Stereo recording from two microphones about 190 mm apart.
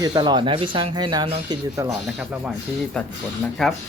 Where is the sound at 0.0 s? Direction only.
20° right (ahead or behind).